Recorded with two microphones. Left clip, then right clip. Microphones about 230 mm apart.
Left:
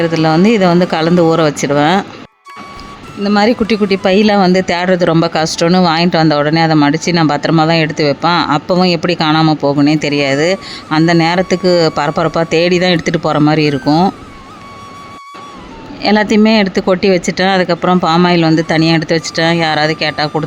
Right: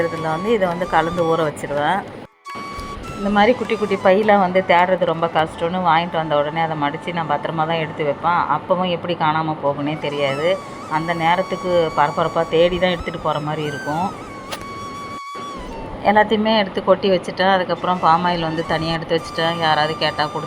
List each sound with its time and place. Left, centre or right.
0.0 s speech: left
3.2 s speech: left
13.8 s speech: centre
16.1 s speech: left